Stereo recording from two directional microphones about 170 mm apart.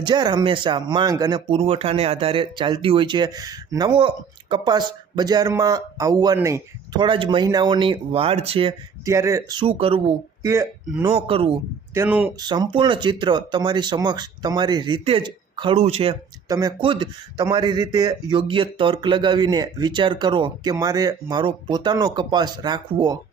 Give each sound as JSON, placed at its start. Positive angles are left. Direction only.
{"t": 0.0, "sound": "speech", "side_deg": -25}
{"t": 1.5, "sound": "speech", "side_deg": -35}
{"t": 9.0, "sound": "speech", "side_deg": -20}
{"t": 10.4, "sound": "speech", "side_deg": -15}
{"t": 11.1, "sound": "speech", "side_deg": -35}
{"t": 11.9, "sound": "speech", "side_deg": -10}
{"t": 12.4, "sound": "speech", "side_deg": -25}
{"t": 16.5, "sound": "speech", "side_deg": -20}